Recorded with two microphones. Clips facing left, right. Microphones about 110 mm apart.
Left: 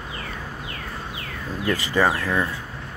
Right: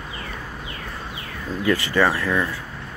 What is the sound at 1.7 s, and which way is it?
Speech, 15° left (ahead or behind).